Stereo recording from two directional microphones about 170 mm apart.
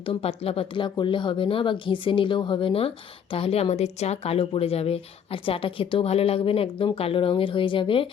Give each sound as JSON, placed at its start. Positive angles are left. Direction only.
{"t": 0.0, "sound": "speech", "side_deg": 35}